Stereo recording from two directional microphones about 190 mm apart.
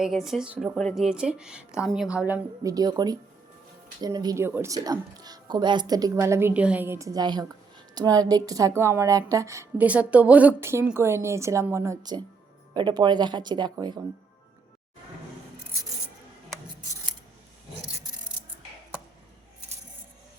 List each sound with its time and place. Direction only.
0.0 s a woman's voice: centre (ahead or behind); by 14.0 s 20° right (ahead or behind)